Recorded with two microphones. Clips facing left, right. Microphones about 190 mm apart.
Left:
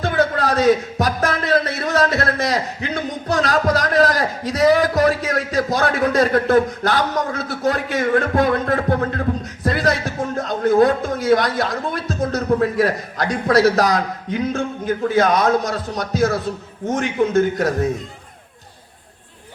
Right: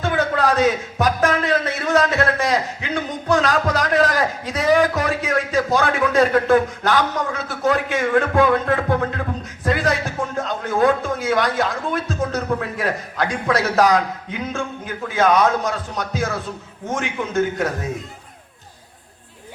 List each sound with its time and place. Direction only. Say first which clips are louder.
0.0 s a man's voice: left 1 dB; 40° left (ahead or behind)